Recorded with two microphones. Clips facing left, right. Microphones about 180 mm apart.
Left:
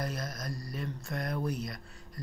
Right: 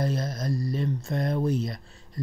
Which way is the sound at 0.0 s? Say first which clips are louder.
Right 8 dB; 25° right (ahead or behind).